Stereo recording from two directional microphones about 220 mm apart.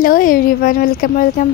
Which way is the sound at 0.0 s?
40° left (ahead or behind).